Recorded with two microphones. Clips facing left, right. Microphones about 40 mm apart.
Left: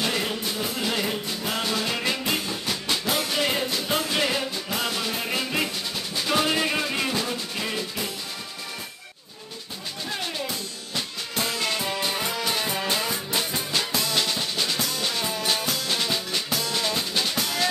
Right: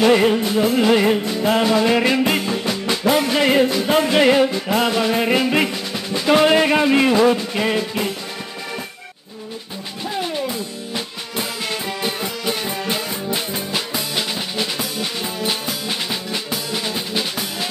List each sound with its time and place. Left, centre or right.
0.0 s music: right
6.1 s speech: right
11.3 s music: centre